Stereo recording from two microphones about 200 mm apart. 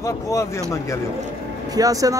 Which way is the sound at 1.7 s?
15° right (ahead or behind).